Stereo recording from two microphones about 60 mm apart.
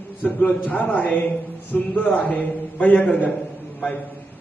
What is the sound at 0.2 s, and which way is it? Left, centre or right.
A man's voice, left.